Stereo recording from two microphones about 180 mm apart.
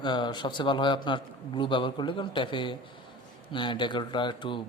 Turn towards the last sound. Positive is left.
turn(degrees=25)  # may be behind; listen again after turning